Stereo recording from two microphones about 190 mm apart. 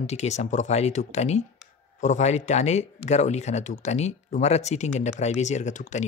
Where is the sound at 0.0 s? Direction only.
35° left (ahead or behind).